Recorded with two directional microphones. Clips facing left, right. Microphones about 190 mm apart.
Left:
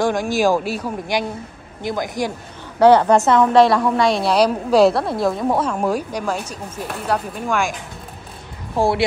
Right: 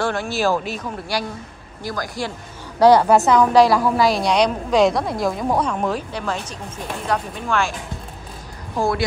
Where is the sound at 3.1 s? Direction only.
Centre (ahead or behind).